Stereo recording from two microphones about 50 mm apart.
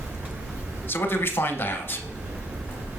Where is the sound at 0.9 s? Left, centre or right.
Left.